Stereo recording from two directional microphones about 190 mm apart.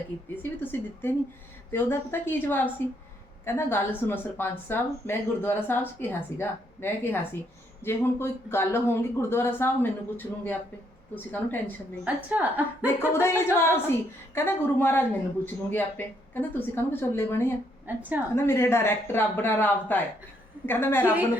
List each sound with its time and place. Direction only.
0.6 s a woman's voice: 10° left (ahead or behind)
12.0 s a woman's voice: 10° right (ahead or behind)
12.8 s a woman's voice: 15° left (ahead or behind)
17.8 s a woman's voice: 10° right (ahead or behind)
18.3 s a woman's voice: 15° left (ahead or behind)